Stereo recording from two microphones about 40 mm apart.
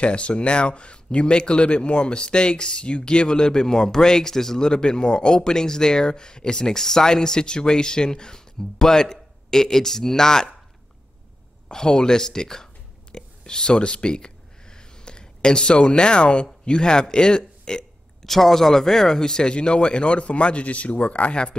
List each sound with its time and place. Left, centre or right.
0.0 s speech: left
11.7 s speech: centre
13.1 s a sound: centre
16.6 s speech: left
18.2 s speech: centre; by 21.5 s left